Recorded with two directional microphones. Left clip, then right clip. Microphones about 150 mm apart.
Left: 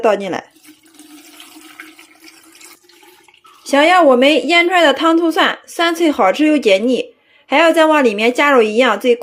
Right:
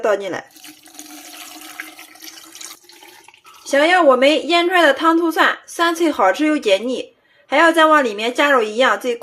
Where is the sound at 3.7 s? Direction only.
40° left (ahead or behind).